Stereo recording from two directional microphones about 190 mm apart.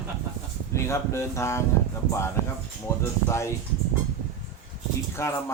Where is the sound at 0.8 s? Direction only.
15° left (ahead or behind).